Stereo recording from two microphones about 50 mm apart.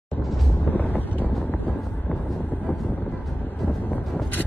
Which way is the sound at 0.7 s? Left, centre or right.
Left.